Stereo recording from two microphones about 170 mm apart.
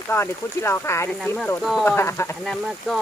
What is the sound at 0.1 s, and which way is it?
Speech, 15° left (ahead or behind).